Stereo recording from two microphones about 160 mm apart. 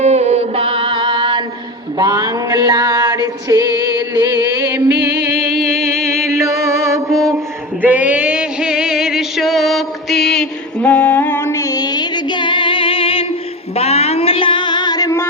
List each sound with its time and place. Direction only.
0.0 s music: 45° right (ahead or behind); by 4.9 s 20° right (ahead or behind)
5.4 s music: centre (ahead or behind)
6.1 s mantra: 20° right (ahead or behind)
7.8 s a sound: 10° right (ahead or behind); by 13.2 s 35° left (ahead or behind)
13.7 s music: 40° left (ahead or behind); by 15.3 s 20° left (ahead or behind)